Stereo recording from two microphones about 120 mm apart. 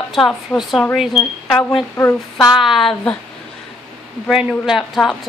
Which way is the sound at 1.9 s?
20° left (ahead or behind).